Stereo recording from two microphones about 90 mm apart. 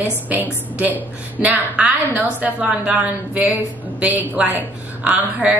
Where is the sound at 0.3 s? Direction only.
20° right (ahead or behind).